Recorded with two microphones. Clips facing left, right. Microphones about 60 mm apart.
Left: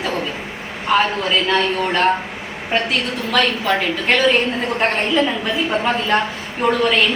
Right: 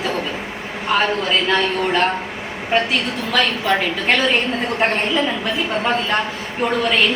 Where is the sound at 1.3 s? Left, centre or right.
Centre.